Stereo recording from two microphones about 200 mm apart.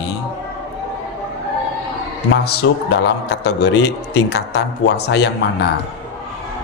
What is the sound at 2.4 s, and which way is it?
A man's voice, 55° left (ahead or behind).